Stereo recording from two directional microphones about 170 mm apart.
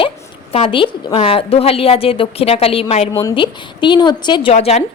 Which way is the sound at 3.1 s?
20° left (ahead or behind).